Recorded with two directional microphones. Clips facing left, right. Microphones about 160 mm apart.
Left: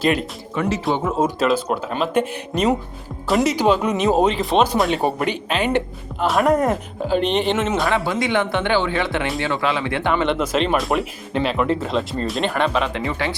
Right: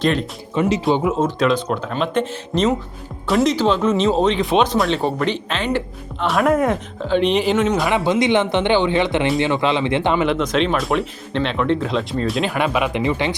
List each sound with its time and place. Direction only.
0.0 s speech: 5° left (ahead or behind)
0.5 s speech: 25° right (ahead or behind)
1.2 s speech: 5° left (ahead or behind)
6.2 s speech: centre (ahead or behind)
7.9 s speech: 20° right (ahead or behind)
10.2 s speech: centre (ahead or behind); by 13.3 s 20° right (ahead or behind)